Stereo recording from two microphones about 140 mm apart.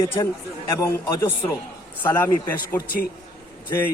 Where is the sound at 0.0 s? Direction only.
20° left (ahead or behind).